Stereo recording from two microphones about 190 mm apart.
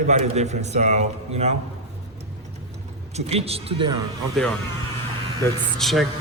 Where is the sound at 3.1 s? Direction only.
35° right (ahead or behind).